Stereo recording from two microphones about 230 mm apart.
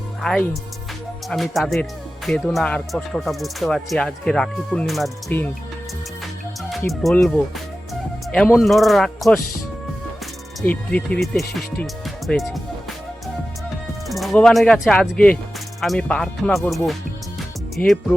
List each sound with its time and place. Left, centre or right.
0.2 s speech: centre
6.7 s speech: centre
10.6 s speech: centre
13.2 s music: centre
15.8 s speech: centre